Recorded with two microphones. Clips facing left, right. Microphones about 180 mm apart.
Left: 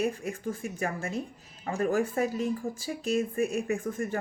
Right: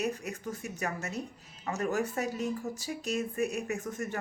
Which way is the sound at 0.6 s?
30° left (ahead or behind).